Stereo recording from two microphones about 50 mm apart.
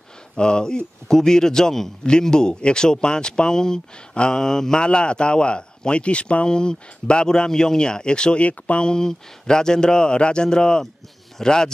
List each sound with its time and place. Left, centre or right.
0.4 s a man's voice: centre